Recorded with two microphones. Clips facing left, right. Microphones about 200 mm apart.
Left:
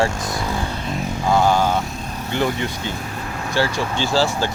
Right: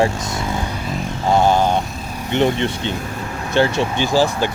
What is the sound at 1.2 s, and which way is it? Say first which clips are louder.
Speech: right 2 dB; 20° right (ahead or behind).